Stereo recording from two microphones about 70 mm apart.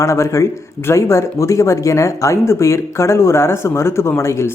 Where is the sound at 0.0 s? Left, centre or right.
Left.